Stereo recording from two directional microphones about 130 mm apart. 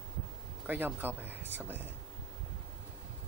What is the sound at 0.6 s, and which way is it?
Speech, 15° right (ahead or behind).